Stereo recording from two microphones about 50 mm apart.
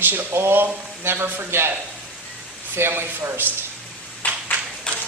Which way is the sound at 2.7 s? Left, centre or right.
Right.